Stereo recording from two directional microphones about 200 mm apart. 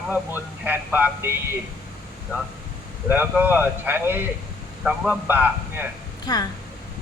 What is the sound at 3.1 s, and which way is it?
Speech, 10° right (ahead or behind).